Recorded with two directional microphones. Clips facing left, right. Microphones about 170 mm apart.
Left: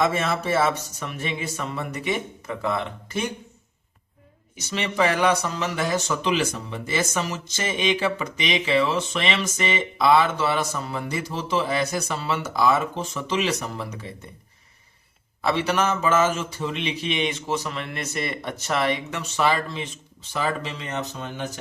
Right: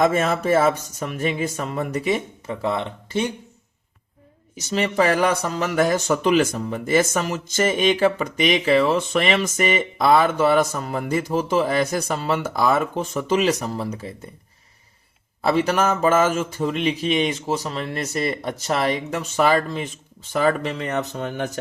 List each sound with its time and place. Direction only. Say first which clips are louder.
0.0 s speech: right 4 dB; 45° right (ahead or behind)
4.7 s speech: right 4 dB; 40° right (ahead or behind)
15.4 s speech: right 3 dB; 40° right (ahead or behind); by 21.6 s 55° right (ahead or behind)